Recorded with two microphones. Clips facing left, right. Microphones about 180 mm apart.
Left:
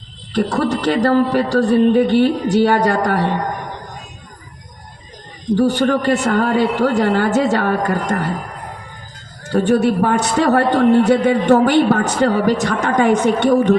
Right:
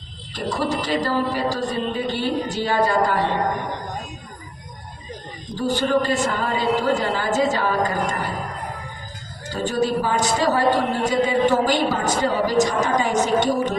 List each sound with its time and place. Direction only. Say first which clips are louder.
0.3 s a man's voice: left 6 dB; 65° left (ahead or behind)
5.5 s a man's voice: left 5 dB; 65° left (ahead or behind)
9.5 s a man's voice: left 7 dB; 65° left (ahead or behind)